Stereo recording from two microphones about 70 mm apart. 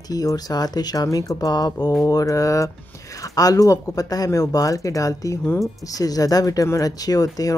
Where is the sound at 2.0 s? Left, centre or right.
Left.